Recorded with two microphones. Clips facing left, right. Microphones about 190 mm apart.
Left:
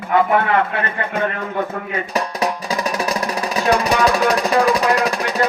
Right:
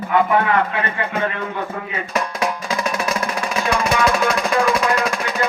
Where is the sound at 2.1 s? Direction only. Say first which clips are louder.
Even; 35° left (ahead or behind).